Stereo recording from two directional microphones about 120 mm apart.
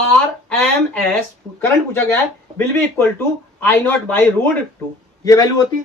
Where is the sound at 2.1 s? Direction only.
15° left (ahead or behind).